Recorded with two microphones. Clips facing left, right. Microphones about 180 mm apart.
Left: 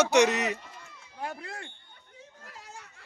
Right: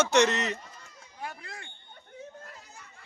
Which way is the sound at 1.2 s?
55° left (ahead or behind).